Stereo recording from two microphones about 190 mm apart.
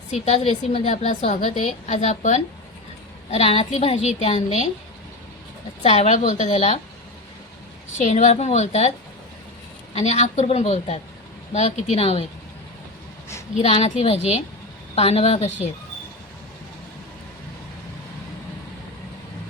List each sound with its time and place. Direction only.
0.1 s a woman's voice: 35° left (ahead or behind)
5.8 s a woman's voice: 35° left (ahead or behind)
7.9 s a woman's voice: 40° left (ahead or behind)
9.9 s a woman's voice: 35° left (ahead or behind)
13.6 s a woman's voice: 30° left (ahead or behind)